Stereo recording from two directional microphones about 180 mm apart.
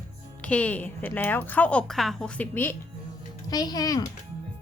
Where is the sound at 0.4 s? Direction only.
10° left (ahead or behind).